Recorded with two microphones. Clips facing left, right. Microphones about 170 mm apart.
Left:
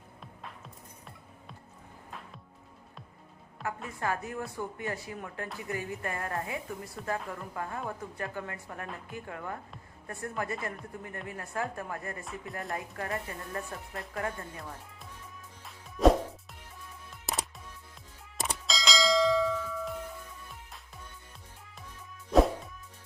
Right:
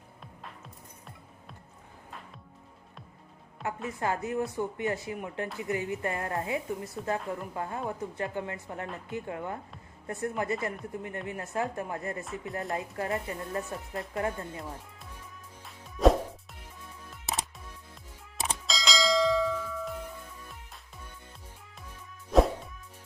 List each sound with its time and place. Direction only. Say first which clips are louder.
3.6 s a woman's voice: right 2 dB; 20° right (ahead or behind)
15.6 s music: even; centre (ahead or behind)
18.6 s bell: even; centre (ahead or behind)
22.3 s music: even; centre (ahead or behind)